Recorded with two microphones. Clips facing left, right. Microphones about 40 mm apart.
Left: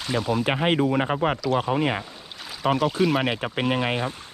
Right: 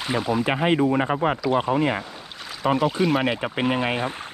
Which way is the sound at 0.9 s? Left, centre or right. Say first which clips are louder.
Right 1 dB; centre.